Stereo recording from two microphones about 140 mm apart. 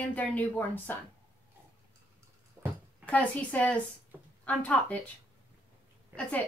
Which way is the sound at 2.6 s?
20° right (ahead or behind).